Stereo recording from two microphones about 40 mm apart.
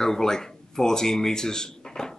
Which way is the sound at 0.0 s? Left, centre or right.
Centre.